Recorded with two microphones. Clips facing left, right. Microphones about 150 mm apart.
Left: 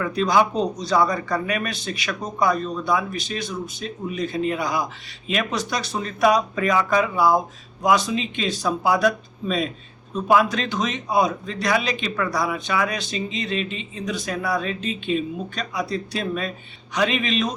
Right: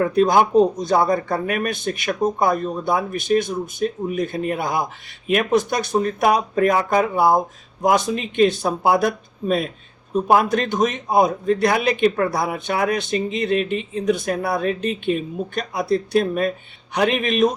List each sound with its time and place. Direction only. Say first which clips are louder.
0.0 s speech: right 4 dB; 55° right (ahead or behind)